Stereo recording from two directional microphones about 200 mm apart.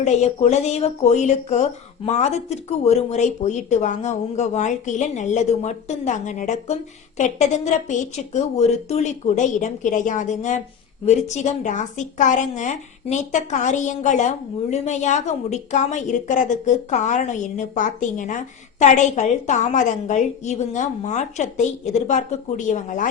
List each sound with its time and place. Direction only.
0.0 s a woman's voice: 35° left (ahead or behind)